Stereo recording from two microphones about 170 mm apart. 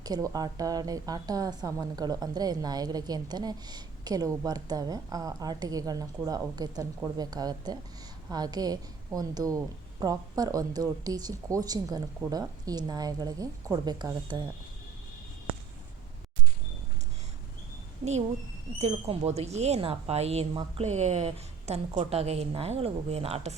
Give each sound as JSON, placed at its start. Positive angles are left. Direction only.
{"t": 0.0, "sound": "a woman's voice", "side_deg": -20}
{"t": 18.8, "sound": "speech", "side_deg": -35}